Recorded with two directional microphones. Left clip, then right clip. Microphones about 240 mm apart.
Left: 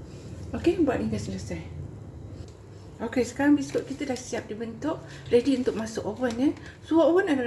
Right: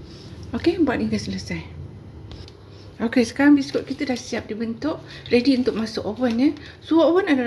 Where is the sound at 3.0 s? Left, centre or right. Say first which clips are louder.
Right 6 dB; right.